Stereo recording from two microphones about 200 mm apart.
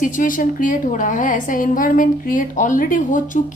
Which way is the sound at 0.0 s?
40° left (ahead or behind).